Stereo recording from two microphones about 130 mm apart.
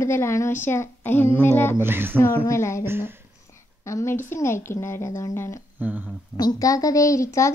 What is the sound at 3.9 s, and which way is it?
A woman's voice, 20° left (ahead or behind).